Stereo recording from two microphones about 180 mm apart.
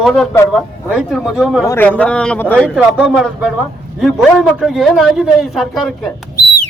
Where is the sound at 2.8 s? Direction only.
5° right (ahead or behind).